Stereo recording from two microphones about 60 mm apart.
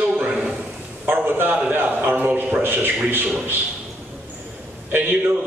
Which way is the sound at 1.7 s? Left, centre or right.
Right.